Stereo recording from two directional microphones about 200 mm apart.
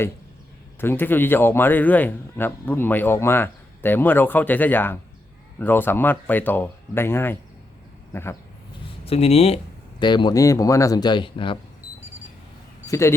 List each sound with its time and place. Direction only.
0.8 s speech: 10° left (ahead or behind)
9.0 s speech: 30° left (ahead or behind)
12.9 s speech: 15° left (ahead or behind)